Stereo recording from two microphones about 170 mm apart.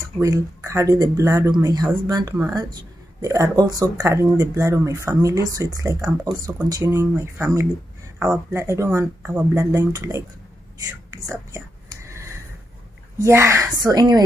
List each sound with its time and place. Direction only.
0.2 s speech: 20° right (ahead or behind)
11.2 s whispering: 15° right (ahead or behind)
13.2 s speech: 15° right (ahead or behind)